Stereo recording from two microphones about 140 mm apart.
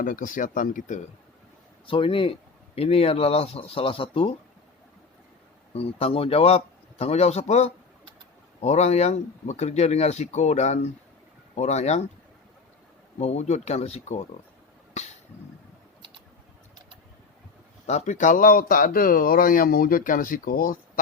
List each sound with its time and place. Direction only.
0.0 s speech: 75° left (ahead or behind)
1.9 s speech: 40° left (ahead or behind)
5.7 s speech: 45° left (ahead or behind)
13.1 s speech: 50° left (ahead or behind)
17.8 s speech: 55° left (ahead or behind); by 21.0 s 90° left